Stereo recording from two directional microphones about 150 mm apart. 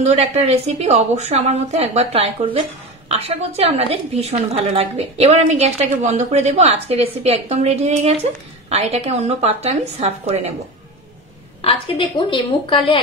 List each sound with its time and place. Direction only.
0.0 s a woman's voice: 45° right (ahead or behind)
11.6 s a woman's voice: 40° left (ahead or behind)